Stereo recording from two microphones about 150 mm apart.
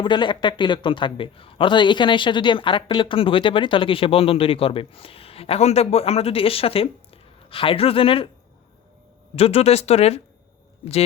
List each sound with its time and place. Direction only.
0.0 s a man's voice: 30° left (ahead or behind)
9.3 s speech: 40° left (ahead or behind)